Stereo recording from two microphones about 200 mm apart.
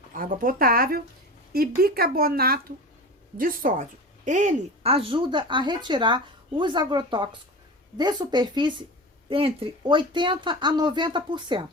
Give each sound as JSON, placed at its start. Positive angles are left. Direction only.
{"t": 0.1, "sound": "speech", "side_deg": -45}